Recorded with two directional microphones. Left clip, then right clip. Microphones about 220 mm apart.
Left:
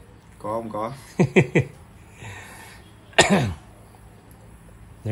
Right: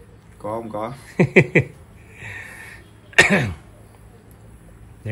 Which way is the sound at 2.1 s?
15° left (ahead or behind).